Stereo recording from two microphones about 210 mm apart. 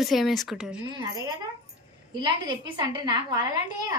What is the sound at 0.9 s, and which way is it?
A woman's voice, 20° right (ahead or behind).